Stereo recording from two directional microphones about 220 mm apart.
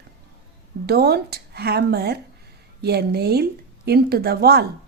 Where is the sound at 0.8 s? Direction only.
45° right (ahead or behind).